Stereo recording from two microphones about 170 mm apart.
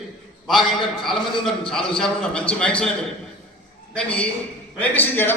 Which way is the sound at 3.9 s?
5° left (ahead or behind).